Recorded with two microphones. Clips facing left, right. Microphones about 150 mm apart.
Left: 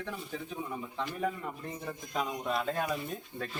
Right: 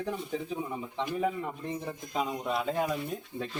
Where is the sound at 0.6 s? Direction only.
15° right (ahead or behind).